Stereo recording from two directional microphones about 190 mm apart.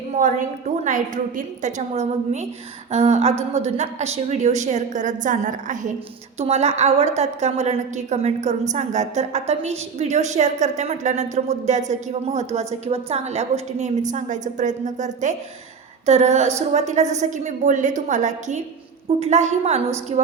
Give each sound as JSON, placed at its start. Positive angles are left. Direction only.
{"t": 0.1, "sound": "a woman's voice", "side_deg": -40}